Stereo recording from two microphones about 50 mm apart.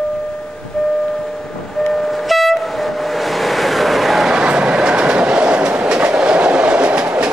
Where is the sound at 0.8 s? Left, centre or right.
Centre.